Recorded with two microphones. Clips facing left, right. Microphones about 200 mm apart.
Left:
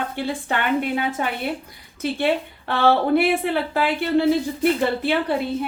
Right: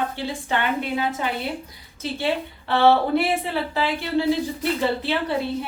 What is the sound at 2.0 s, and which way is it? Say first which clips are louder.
A woman's voice: left 3 dB; 55° left (ahead or behind).